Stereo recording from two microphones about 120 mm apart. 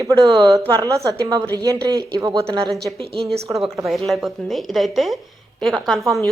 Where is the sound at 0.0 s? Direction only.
30° right (ahead or behind).